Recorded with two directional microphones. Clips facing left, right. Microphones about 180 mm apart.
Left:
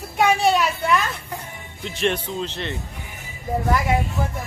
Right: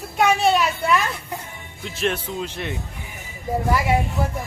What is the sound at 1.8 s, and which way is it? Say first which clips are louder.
Speech: left 1 dB; centre (ahead or behind).